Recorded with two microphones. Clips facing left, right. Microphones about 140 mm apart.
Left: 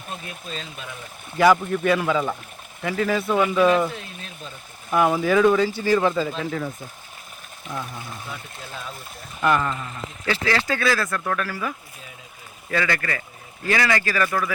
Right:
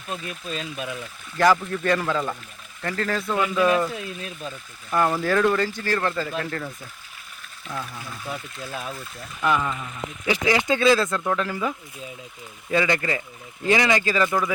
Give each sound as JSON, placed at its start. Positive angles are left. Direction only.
{"t": 1.4, "sound": "speech", "side_deg": 5}
{"t": 4.9, "sound": "speech", "side_deg": 5}
{"t": 7.7, "sound": "speech", "side_deg": 20}
{"t": 9.4, "sound": "speech", "side_deg": -5}
{"t": 10.2, "sound": "speech", "side_deg": -15}
{"t": 12.7, "sound": "speech", "side_deg": -20}